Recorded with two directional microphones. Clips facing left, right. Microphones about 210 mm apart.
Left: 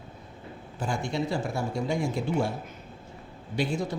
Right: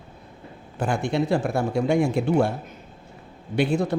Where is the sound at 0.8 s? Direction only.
65° right (ahead or behind).